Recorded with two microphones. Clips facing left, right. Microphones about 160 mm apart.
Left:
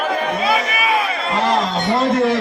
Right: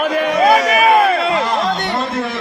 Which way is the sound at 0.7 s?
50° right (ahead or behind).